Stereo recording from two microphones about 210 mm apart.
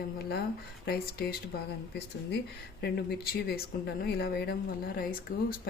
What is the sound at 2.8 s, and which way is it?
Speech, 50° left (ahead or behind).